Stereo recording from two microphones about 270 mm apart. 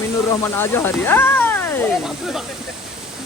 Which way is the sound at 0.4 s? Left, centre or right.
Centre.